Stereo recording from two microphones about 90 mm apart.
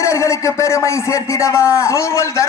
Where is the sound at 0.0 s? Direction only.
35° left (ahead or behind).